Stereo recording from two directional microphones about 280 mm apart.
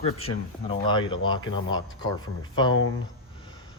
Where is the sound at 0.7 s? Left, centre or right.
Centre.